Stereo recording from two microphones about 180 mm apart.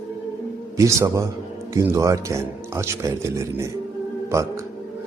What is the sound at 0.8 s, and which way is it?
Speech, 15° right (ahead or behind).